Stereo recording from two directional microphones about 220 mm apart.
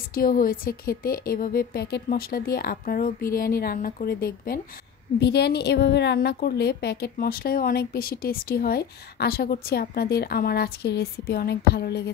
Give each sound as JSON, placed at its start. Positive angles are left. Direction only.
{"t": 0.1, "sound": "a woman's voice", "side_deg": 40}